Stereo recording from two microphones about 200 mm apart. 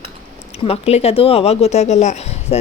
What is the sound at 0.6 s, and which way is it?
Speech, 30° left (ahead or behind).